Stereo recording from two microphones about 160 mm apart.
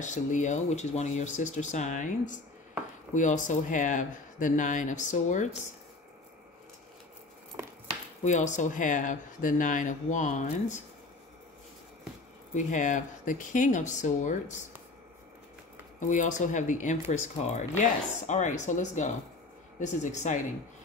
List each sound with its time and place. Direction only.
0.0 s speech: 50° left (ahead or behind)
8.2 s speech: 50° left (ahead or behind)
12.5 s speech: 50° left (ahead or behind)
16.0 s speech: 50° left (ahead or behind)